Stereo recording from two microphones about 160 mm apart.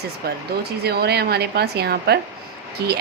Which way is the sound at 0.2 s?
75° right (ahead or behind).